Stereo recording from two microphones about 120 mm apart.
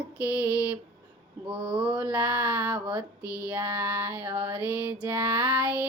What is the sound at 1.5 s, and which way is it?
Speech, 40° right (ahead or behind).